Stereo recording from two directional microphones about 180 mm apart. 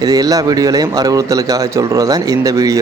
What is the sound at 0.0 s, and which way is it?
A man's voice, 20° right (ahead or behind).